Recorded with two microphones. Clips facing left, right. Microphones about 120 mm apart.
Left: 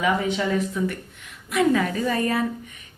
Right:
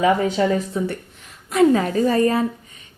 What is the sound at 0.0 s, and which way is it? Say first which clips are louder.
A woman's voice: right 5 dB; 40° right (ahead or behind).